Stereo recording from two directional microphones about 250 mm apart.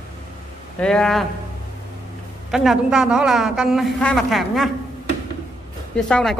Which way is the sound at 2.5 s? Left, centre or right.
Centre.